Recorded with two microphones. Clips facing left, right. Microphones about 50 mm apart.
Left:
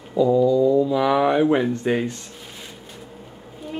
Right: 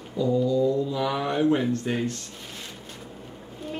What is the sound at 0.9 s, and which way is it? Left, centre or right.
Speech, left.